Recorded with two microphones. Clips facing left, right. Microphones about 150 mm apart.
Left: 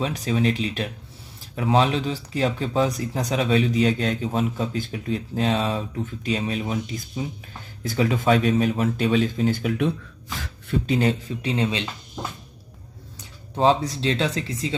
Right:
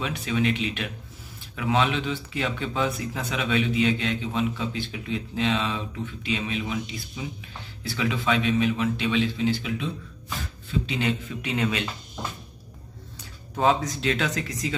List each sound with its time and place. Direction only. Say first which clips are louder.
0.0 s speech: left 3 dB; 35° left (ahead or behind); by 9.9 s 55° left (ahead or behind)
10.9 s speech: left 8 dB; 40° left (ahead or behind)
13.2 s speech: left 3 dB; 30° left (ahead or behind)